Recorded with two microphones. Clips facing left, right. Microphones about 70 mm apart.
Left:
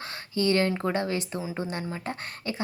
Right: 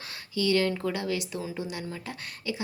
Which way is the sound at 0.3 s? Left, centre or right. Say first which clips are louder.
Left 1 dB; left.